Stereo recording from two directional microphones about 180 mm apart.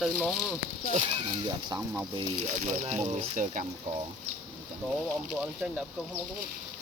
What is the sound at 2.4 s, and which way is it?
Speech, 40° right (ahead or behind).